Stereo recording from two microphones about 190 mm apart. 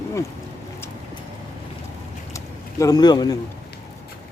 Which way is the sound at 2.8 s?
20° left (ahead or behind).